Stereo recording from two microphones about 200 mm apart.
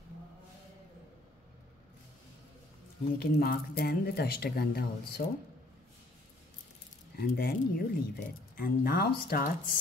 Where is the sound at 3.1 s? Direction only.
50° left (ahead or behind).